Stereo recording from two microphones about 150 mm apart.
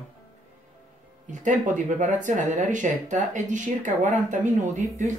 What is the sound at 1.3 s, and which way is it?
Speech, 55° right (ahead or behind).